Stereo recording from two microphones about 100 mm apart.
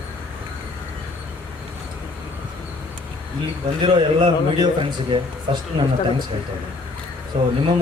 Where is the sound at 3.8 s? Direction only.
50° right (ahead or behind).